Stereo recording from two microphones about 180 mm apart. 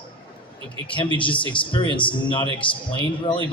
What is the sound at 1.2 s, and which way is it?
A man's voice, 30° left (ahead or behind).